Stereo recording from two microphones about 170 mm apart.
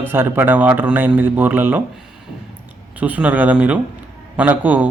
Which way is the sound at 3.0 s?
10° right (ahead or behind).